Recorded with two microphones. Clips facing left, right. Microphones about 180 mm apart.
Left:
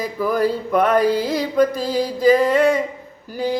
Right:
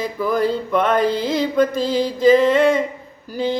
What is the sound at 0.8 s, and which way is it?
Music, 25° right (ahead or behind).